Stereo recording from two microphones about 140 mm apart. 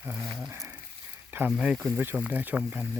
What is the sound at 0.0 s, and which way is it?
Speech, 20° right (ahead or behind).